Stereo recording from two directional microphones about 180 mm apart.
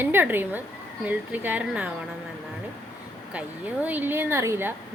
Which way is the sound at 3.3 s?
5° right (ahead or behind).